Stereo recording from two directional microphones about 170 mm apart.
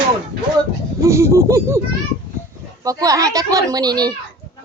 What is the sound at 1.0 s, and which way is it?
Speech, 15° right (ahead or behind).